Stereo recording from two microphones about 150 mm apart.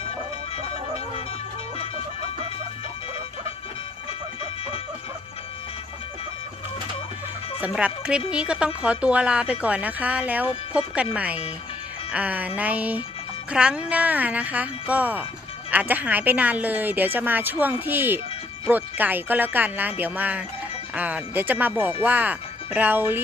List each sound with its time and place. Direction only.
0.5 s music: 40° left (ahead or behind)
7.7 s a woman's voice: 5° right (ahead or behind)